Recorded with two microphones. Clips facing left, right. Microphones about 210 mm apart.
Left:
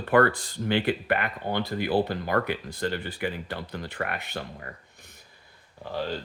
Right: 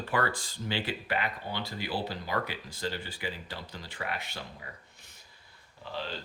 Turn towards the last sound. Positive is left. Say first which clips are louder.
# left 7 dB
turn(degrees=45)  # may be behind; listen again after turning